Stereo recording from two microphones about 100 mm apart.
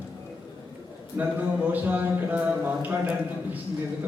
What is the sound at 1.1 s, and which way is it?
Speech, 15° right (ahead or behind).